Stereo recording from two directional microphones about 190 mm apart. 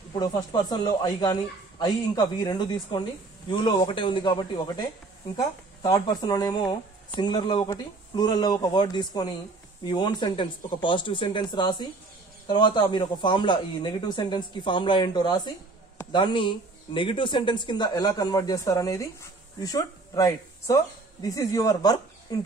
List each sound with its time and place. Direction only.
0.1 s speech: 20° left (ahead or behind)